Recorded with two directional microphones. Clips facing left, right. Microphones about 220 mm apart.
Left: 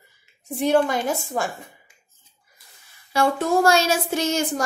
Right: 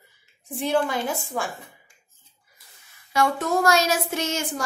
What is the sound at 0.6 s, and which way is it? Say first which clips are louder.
Speech: left 4 dB; 45° left (ahead or behind).